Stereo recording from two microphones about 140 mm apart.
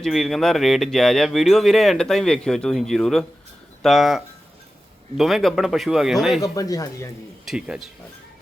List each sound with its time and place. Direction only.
0.0 s speech: centre (ahead or behind)
6.4 s speech: 25° left (ahead or behind)
7.4 s speech: 5° right (ahead or behind)